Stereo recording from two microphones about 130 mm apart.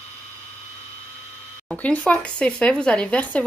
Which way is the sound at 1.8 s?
10° left (ahead or behind).